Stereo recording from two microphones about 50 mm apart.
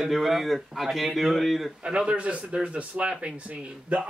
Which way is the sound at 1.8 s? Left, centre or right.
Centre.